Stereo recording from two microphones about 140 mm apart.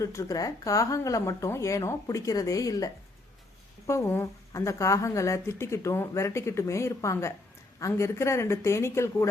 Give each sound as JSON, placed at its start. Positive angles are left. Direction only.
{"t": 0.0, "sound": "speech", "side_deg": 20}